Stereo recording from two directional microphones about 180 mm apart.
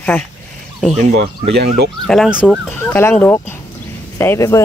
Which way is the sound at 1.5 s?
65° right (ahead or behind).